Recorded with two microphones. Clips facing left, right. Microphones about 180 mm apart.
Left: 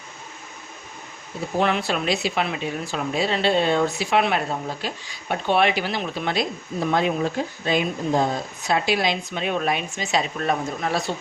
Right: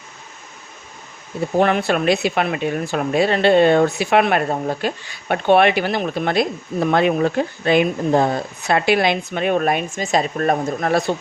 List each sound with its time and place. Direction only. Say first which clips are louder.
1.5 s speech: right 5 dB; 55° right (ahead or behind)